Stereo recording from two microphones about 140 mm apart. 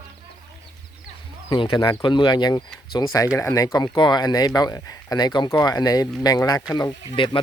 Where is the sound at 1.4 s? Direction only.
35° left (ahead or behind).